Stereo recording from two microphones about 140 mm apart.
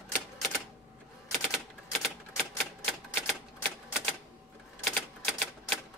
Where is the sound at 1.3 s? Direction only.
5° left (ahead or behind).